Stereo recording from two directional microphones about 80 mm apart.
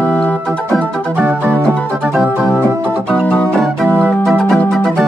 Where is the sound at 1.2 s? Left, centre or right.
Right.